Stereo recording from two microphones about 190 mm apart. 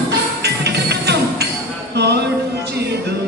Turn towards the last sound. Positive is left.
turn(degrees=-60)  # may be behind; listen again after turning